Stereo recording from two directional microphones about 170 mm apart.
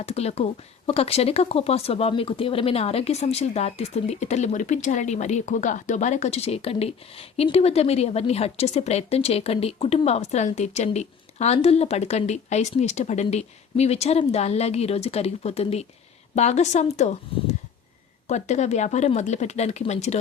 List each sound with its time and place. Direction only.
0.0 s speech: 40° left (ahead or behind)
18.3 s speech: 40° left (ahead or behind)